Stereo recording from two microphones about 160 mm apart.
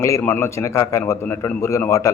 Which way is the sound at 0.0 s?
15° left (ahead or behind).